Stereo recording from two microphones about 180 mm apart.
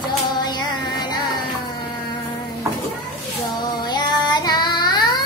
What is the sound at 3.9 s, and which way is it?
Child singing, 25° left (ahead or behind).